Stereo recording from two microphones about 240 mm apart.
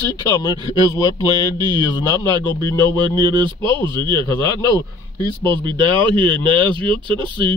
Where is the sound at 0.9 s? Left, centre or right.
Centre.